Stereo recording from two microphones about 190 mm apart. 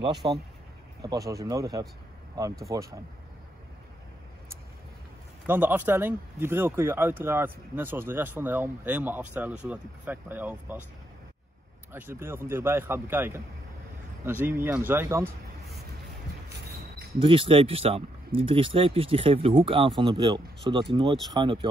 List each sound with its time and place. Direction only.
0.2 s speech: 25° right (ahead or behind)
5.5 s speech: 10° right (ahead or behind)
11.9 s speech: 10° right (ahead or behind)
17.2 s speech: 30° right (ahead or behind)